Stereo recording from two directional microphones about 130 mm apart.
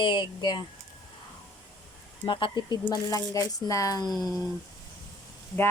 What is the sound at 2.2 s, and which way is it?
Speech, 35° left (ahead or behind).